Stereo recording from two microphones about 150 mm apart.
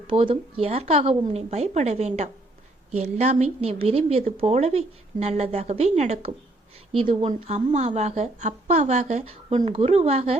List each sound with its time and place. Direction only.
0.1 s a woman's voice: 35° right (ahead or behind)
7.3 s a woman's voice: 50° right (ahead or behind)